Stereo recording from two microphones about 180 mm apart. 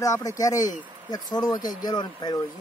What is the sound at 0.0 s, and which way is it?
Speech, 20° left (ahead or behind).